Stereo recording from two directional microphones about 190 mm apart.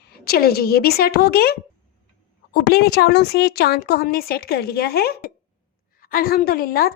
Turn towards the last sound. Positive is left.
turn(degrees=50)  # may be behind; listen again after turning